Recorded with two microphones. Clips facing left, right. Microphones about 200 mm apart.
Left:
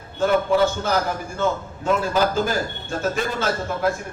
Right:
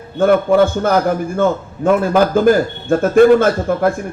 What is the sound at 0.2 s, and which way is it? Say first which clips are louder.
A man's voice: right 7 dB; 55° right (ahead or behind).